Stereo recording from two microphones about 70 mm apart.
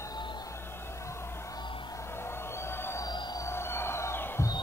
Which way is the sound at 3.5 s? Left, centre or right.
Left.